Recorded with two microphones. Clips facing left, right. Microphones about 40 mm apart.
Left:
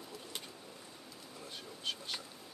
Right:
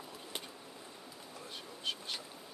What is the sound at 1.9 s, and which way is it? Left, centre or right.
Insect, centre.